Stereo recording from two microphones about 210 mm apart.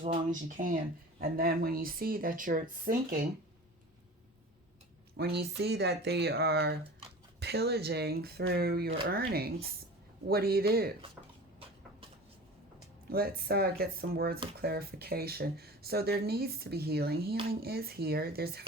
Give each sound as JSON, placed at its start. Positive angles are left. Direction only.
{"t": 0.0, "sound": "speech", "side_deg": -35}
{"t": 5.1, "sound": "speech", "side_deg": -50}
{"t": 13.1, "sound": "speech", "side_deg": -45}